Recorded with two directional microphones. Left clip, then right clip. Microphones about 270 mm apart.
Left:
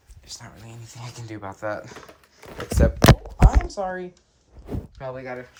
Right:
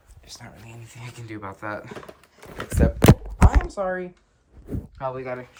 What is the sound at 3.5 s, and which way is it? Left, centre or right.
Speech, centre.